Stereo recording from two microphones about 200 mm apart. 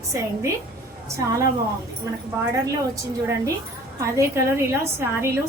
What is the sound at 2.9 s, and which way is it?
A woman's voice, 15° right (ahead or behind).